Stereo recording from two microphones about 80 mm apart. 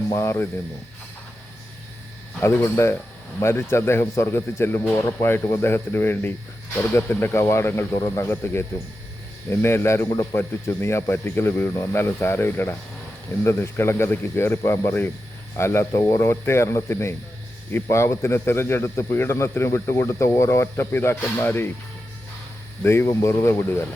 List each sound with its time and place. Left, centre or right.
0.1 s a man's voice: left
2.4 s a man's voice: left
22.8 s a man's voice: left